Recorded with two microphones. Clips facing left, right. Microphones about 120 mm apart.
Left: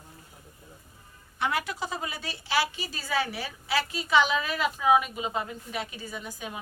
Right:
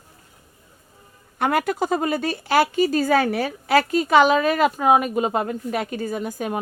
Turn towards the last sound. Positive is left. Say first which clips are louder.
# right 12 dB
turn(degrees=-55)  # may be behind; listen again after turning